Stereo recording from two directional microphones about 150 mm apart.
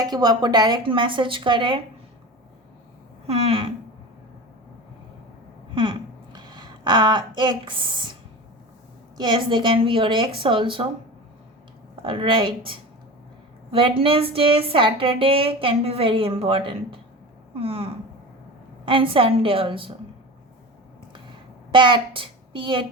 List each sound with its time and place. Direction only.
0.0 s a woman's voice: 25° right (ahead or behind)
3.2 s a woman's voice: 40° right (ahead or behind)
5.7 s a sound: 30° right (ahead or behind)
9.1 s a woman's voice: 30° right (ahead or behind)
12.0 s a woman's voice: 35° right (ahead or behind)
21.7 s a woman's voice: 30° right (ahead or behind)